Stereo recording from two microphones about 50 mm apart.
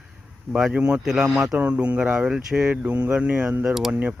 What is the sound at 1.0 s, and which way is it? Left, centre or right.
Speech, centre.